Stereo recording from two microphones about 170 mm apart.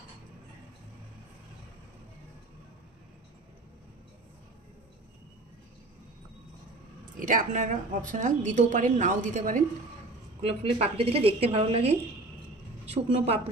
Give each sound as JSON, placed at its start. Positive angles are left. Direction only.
{"t": 7.2, "sound": "a woman's voice", "side_deg": -50}
{"t": 10.4, "sound": "a woman's voice", "side_deg": -35}